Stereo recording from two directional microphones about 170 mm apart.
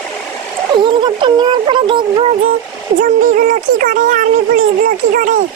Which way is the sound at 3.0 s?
50° right (ahead or behind).